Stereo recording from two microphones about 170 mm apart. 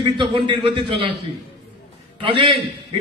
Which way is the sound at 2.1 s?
30° right (ahead or behind).